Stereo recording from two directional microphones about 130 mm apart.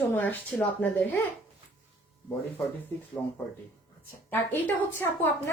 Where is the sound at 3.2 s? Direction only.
25° left (ahead or behind).